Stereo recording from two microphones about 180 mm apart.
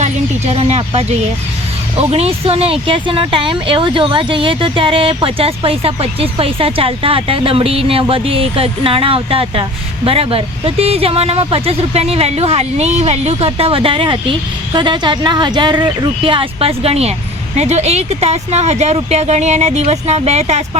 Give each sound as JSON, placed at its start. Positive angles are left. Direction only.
{"t": 0.0, "sound": "speech", "side_deg": -35}